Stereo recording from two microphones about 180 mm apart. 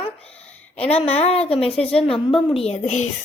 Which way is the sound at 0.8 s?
35° left (ahead or behind).